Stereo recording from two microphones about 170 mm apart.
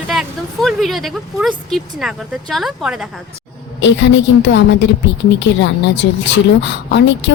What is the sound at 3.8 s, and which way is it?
A woman's voice, 90° left.